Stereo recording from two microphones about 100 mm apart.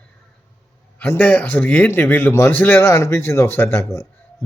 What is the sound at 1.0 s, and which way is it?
A man's voice, 15° left (ahead or behind).